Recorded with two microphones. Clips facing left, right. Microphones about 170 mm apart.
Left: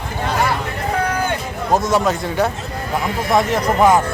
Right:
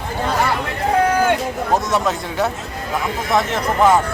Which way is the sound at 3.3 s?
10° left (ahead or behind).